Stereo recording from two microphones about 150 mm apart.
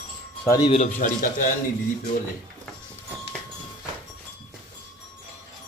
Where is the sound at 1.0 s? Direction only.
60° left (ahead or behind).